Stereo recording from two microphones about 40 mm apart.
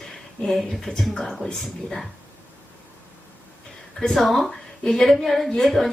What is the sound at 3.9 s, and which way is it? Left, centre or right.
A woman's voice, centre.